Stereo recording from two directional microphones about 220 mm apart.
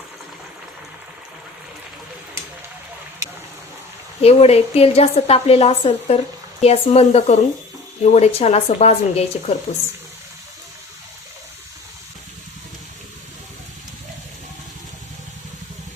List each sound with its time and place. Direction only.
4.2 s a woman's voice: 25° left (ahead or behind)